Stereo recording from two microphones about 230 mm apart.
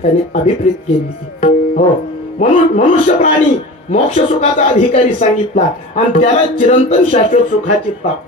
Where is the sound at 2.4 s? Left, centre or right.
Left.